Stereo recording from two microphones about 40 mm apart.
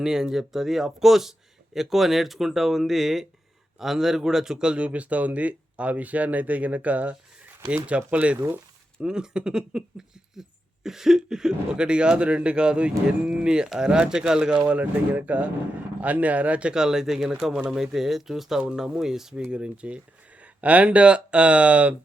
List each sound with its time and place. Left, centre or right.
0.0 s speech: centre
4.5 s speech: right
4.9 s speech: right
9.0 s speech: right
10.8 s speech: centre
14.7 s speech: right
16.7 s speech: centre
19.5 s speech: right